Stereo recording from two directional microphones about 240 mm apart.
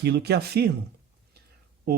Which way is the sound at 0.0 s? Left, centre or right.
Right.